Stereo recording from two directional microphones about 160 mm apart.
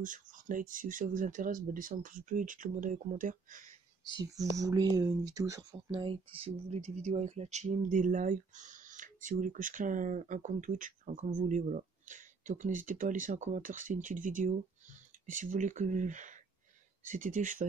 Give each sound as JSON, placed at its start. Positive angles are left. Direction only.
{"t": 0.0, "sound": "speech", "side_deg": -55}
{"t": 4.2, "sound": "speech", "side_deg": -20}
{"t": 5.9, "sound": "speech", "side_deg": -35}